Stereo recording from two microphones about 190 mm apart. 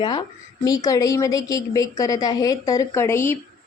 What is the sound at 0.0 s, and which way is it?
A woman's voice, 25° left (ahead or behind).